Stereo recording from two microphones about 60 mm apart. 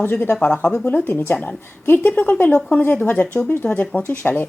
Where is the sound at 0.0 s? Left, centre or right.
Left.